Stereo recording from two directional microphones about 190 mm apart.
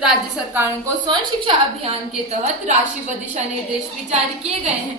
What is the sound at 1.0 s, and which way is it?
A woman's voice, 30° right (ahead or behind).